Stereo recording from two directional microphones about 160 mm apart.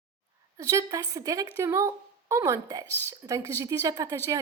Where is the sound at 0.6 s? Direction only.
20° right (ahead or behind).